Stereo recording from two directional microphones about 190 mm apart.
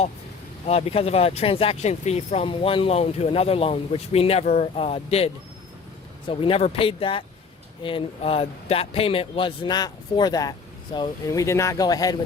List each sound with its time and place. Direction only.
0.7 s speech: 30° left (ahead or behind)